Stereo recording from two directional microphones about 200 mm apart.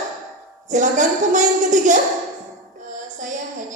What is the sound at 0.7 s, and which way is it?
A woman's voice, 40° right (ahead or behind).